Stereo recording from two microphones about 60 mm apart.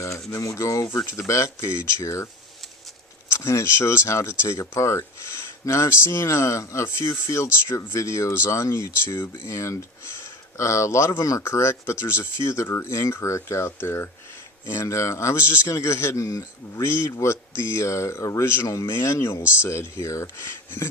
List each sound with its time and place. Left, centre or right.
0.3 s a sound: left
0.9 s a man's voice: left
3.3 s a man's voice: left
13.7 s speech: left
14.7 s speech: left
15.6 s a man's voice: left
18.4 s a man's voice: left
20.4 s speech: left